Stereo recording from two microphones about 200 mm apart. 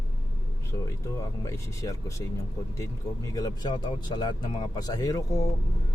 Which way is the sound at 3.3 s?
20° left (ahead or behind).